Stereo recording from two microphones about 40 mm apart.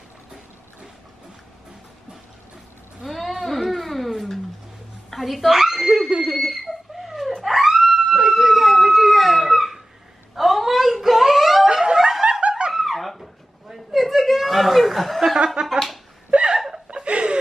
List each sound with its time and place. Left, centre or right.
3.1 s a sound: centre
5.1 s speech: centre
5.6 s laughter: centre
6.3 s fowl: centre
7.4 s a sound: centre
7.8 s dog: centre
10.3 s wail: centre
11.7 s snicker: centre
12.4 s snicker: right
12.7 s a sound: centre
15.3 s a sound: right
16.3 s laughter: right
16.5 s chuckle: centre
16.8 s chuckle: right